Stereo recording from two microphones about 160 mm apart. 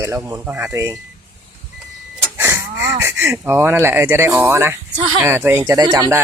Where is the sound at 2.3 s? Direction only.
15° right (ahead or behind).